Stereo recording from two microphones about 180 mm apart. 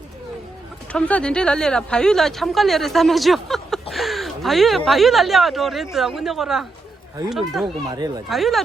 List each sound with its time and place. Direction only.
0.9 s speech: 5° left (ahead or behind)
7.9 s speech: 20° right (ahead or behind)
8.3 s speech: centre (ahead or behind)